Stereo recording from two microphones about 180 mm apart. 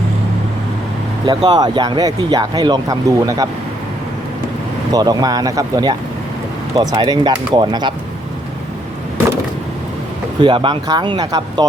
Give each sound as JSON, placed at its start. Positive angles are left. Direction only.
{"t": 1.2, "sound": "speech", "side_deg": -25}
{"t": 4.9, "sound": "speech", "side_deg": -20}
{"t": 10.4, "sound": "speech", "side_deg": -25}